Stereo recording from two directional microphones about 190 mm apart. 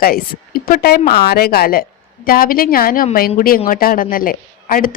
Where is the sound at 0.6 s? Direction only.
55° left (ahead or behind).